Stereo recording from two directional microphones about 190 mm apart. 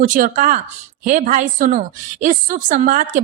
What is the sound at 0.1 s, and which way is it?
Speech, 45° right (ahead or behind).